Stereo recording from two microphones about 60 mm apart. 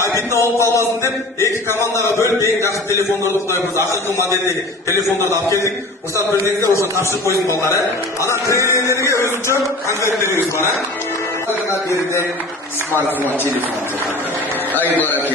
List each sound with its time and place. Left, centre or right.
0.1 s a man's voice: left
4.8 s a man's voice: left
6.1 s a man's voice: right
6.7 s a man's voice: left